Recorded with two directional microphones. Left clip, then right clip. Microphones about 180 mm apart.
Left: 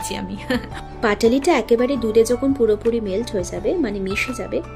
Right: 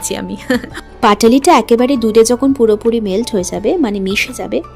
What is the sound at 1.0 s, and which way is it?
Speech, 45° right (ahead or behind).